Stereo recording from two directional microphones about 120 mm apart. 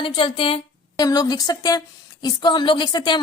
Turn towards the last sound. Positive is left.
turn(degrees=40)  # may be behind; listen again after turning